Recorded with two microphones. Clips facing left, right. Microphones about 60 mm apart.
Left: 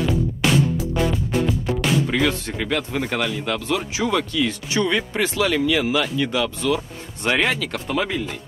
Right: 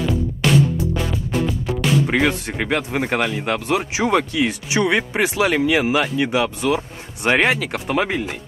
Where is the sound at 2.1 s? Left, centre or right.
Right.